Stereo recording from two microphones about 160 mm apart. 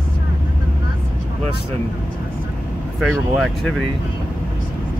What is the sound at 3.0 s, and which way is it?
Speech, 5° left (ahead or behind).